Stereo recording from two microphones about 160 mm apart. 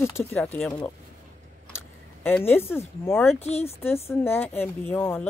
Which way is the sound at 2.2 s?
15° left (ahead or behind).